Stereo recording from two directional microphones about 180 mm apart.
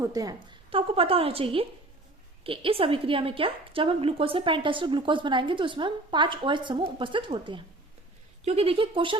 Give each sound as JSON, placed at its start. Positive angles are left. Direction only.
{"t": 0.0, "sound": "a woman's voice", "side_deg": -20}